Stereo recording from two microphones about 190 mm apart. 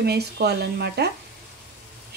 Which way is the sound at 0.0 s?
55° right (ahead or behind).